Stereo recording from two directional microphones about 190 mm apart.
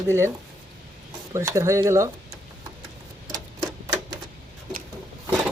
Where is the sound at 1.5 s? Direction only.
15° right (ahead or behind).